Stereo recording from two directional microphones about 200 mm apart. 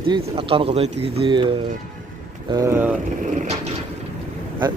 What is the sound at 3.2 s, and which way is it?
Vehicle, 40° right (ahead or behind).